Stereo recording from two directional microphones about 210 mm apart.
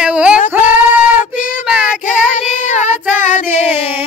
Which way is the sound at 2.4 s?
35° left (ahead or behind).